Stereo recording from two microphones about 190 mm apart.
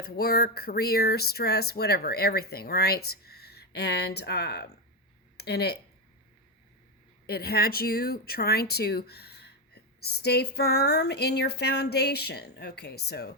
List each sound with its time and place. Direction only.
0.0 s speech: 55° left (ahead or behind)
7.3 s speech: 55° left (ahead or behind)